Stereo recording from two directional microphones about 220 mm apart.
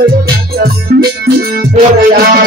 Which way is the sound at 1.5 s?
40° right (ahead or behind).